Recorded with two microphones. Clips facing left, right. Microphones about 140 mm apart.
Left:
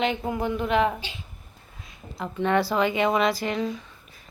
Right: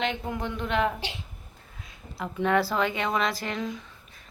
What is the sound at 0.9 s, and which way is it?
Speech, 75° right (ahead or behind).